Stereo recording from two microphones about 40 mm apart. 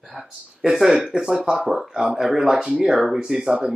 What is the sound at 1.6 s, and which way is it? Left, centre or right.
Speech, centre.